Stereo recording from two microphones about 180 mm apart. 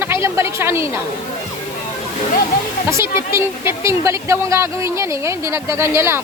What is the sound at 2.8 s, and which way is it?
Speech, 15° right (ahead or behind).